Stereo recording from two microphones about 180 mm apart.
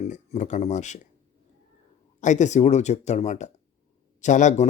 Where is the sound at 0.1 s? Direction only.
40° left (ahead or behind).